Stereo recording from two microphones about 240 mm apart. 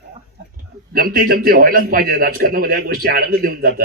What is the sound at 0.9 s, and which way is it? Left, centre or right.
A man's voice, right.